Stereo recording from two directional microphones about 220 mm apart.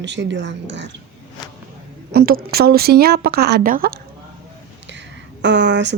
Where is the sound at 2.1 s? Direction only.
45° right (ahead or behind).